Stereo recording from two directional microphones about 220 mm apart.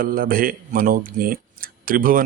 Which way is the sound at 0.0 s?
40° right (ahead or behind).